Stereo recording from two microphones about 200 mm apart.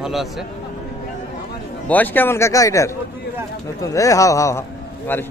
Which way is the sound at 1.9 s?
10° left (ahead or behind).